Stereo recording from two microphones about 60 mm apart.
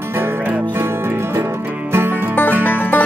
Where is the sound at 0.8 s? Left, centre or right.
Right.